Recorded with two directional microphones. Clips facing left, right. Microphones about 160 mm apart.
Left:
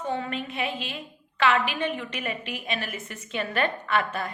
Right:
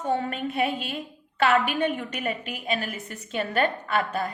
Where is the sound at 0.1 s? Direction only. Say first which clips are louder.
Right 5 dB; 45° right (ahead or behind).